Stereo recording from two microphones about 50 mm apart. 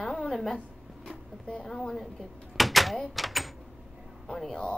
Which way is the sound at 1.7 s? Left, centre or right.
Centre.